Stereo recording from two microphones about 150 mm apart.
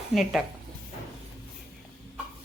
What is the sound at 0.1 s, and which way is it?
Speech, centre (ahead or behind).